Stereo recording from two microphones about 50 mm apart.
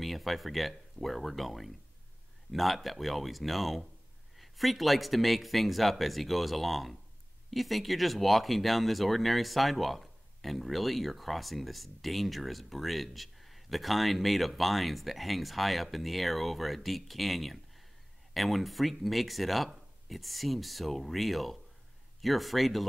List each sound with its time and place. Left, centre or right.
0.0 s speech: centre